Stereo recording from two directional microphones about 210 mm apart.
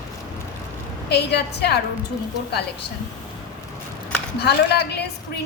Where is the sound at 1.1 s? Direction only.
50° left (ahead or behind).